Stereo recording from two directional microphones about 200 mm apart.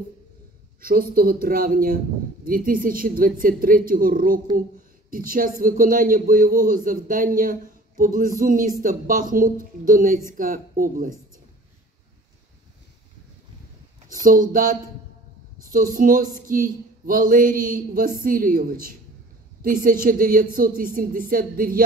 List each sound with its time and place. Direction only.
0.7 s speech: 45° right (ahead or behind)
14.0 s speech: 45° right (ahead or behind)